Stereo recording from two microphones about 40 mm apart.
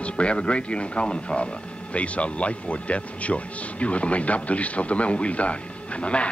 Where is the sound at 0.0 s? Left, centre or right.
Left.